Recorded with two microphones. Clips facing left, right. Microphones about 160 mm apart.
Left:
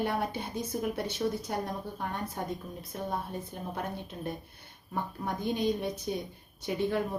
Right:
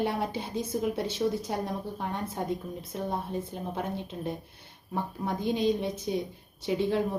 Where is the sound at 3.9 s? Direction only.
25° right (ahead or behind).